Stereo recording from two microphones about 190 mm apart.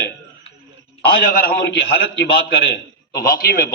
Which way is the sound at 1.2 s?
50° left (ahead or behind).